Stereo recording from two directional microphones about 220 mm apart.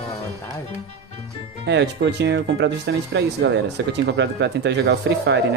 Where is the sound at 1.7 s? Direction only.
50° right (ahead or behind).